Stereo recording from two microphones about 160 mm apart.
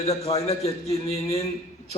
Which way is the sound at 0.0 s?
40° left (ahead or behind).